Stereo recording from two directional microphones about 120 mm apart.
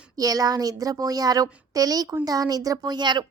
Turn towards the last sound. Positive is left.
turn(degrees=-40)  # may be behind; listen again after turning